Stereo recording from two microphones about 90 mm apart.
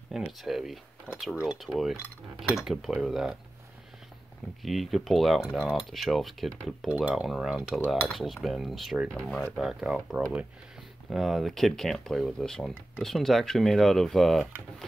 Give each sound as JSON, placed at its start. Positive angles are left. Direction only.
{"t": 0.1, "sound": "speech", "side_deg": -5}
{"t": 1.1, "sound": "speech", "side_deg": -20}
{"t": 1.6, "sound": "speech", "side_deg": 0}
{"t": 4.6, "sound": "speech", "side_deg": 0}